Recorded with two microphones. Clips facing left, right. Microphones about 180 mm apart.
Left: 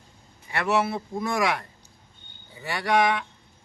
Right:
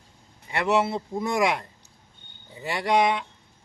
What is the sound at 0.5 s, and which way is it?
A man's voice, 20° right (ahead or behind).